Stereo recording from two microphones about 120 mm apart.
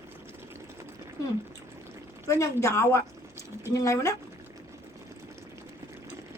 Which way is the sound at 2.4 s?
25° left (ahead or behind).